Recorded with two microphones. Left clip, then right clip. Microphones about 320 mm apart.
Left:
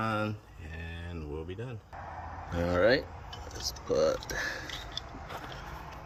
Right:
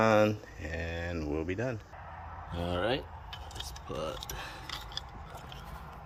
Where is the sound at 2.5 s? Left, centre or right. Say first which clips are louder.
Left 7 dB; centre.